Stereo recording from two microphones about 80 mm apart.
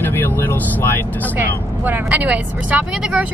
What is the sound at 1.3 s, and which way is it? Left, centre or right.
Speech, right.